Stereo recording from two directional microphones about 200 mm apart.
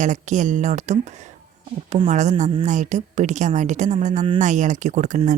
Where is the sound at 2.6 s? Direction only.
35° right (ahead or behind).